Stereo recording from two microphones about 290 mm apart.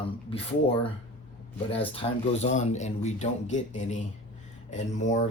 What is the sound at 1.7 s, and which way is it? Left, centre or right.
Speech, centre.